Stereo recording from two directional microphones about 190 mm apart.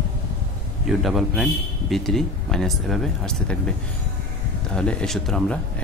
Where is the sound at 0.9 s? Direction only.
Centre (ahead or behind).